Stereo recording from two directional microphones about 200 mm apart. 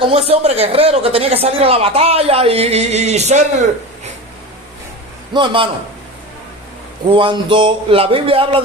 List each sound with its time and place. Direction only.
0.1 s speech: 30° right (ahead or behind)
5.3 s speech: 25° right (ahead or behind)
7.1 s speech: 25° right (ahead or behind)